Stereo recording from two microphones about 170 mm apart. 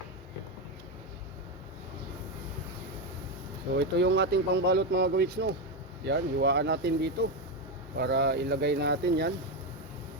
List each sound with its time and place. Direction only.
3.8 s speech: 90° right